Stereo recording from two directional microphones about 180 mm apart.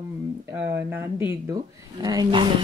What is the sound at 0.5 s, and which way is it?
A woman's voice, 10° right (ahead or behind).